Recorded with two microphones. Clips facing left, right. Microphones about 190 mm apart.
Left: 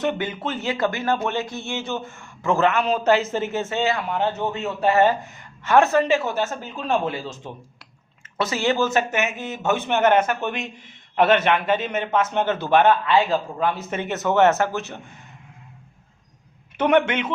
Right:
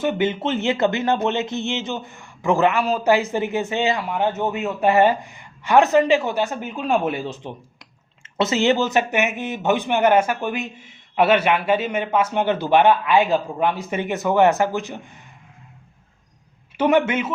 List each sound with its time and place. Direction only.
0.2 s speech: 25° right (ahead or behind)
16.7 s speech: 5° right (ahead or behind)